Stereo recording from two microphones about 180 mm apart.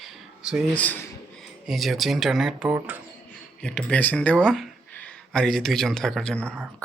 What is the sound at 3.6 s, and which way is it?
Speech, 5° left (ahead or behind).